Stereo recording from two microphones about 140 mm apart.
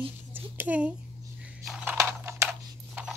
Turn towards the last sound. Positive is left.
turn(degrees=-10)  # may be behind; listen again after turning